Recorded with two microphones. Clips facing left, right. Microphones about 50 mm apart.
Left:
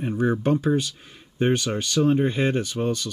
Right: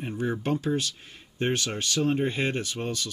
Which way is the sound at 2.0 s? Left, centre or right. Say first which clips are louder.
Left 6 dB; left.